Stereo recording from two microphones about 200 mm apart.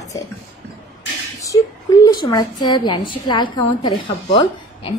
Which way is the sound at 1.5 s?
20° left (ahead or behind).